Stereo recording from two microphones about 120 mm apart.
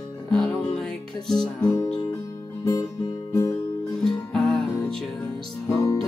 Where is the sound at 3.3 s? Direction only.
30° left (ahead or behind).